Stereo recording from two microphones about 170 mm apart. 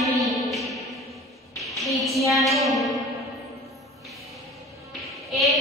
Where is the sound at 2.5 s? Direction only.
Centre (ahead or behind).